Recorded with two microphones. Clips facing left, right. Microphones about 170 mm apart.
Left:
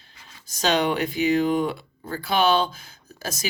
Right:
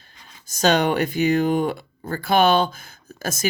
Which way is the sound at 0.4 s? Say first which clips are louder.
Right 3 dB; 45° right (ahead or behind).